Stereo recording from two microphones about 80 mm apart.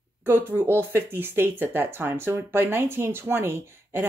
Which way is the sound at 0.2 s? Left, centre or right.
Right.